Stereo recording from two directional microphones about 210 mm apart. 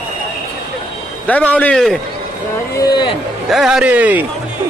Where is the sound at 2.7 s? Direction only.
15° left (ahead or behind).